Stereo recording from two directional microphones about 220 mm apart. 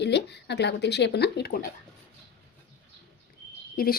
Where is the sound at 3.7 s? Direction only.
40° left (ahead or behind).